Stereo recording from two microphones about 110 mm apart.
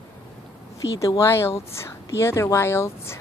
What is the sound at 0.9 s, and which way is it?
A woman's voice, 25° left (ahead or behind).